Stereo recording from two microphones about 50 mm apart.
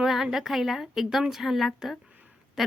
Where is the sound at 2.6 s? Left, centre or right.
Centre.